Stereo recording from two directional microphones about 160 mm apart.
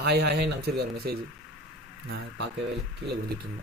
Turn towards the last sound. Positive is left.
turn(degrees=-90)